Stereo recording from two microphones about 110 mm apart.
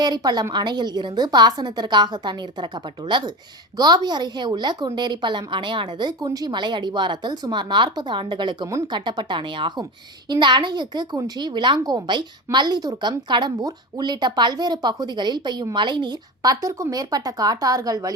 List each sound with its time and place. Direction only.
0.0 s a woman's voice: 40° right (ahead or behind)